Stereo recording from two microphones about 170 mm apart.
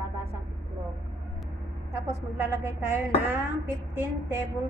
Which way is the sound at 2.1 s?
15° right (ahead or behind).